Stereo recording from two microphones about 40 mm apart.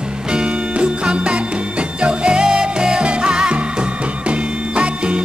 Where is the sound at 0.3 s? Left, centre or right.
Right.